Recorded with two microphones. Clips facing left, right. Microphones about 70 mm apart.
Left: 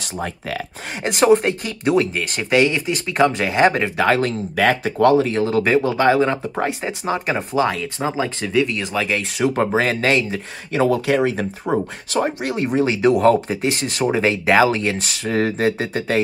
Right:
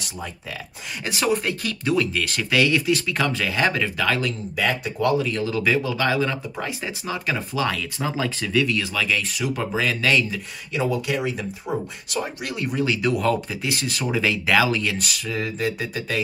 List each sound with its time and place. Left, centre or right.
0.0 s speech: left
1.0 s speech: left
5.3 s speech: left
8.5 s speech: left
15.3 s speech: left